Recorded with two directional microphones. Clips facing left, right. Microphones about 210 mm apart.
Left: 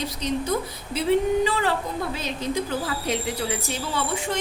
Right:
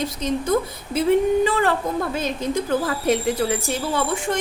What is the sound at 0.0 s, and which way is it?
Speech, 50° right (ahead or behind).